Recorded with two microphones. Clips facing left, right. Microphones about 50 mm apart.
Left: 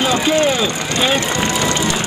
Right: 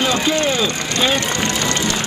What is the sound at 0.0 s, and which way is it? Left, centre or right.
Speech, centre.